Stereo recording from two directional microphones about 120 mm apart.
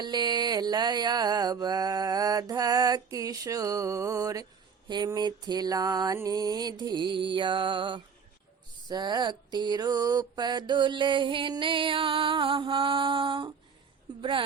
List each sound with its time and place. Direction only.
0.0 s mantra: 35° right (ahead or behind)
14.2 s a woman's voice: 45° right (ahead or behind)